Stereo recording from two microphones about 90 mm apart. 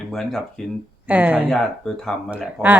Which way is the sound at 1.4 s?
5° left (ahead or behind).